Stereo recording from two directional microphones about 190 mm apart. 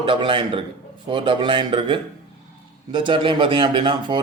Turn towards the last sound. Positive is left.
turn(degrees=-25)  # may be behind; listen again after turning